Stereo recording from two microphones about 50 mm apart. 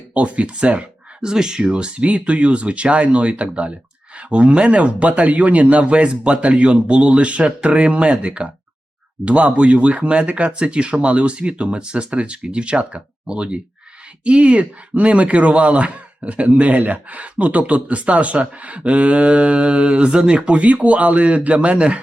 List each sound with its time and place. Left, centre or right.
0.1 s speech: right
1.2 s speech: centre